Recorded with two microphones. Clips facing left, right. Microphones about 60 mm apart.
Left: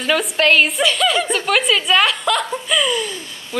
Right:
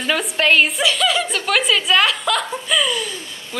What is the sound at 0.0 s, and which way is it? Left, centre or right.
A woman's voice, centre.